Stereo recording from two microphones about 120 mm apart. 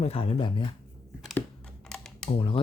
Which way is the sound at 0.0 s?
55° left (ahead or behind).